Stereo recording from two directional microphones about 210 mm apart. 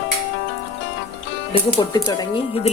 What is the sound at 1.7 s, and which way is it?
Speech, 20° left (ahead or behind).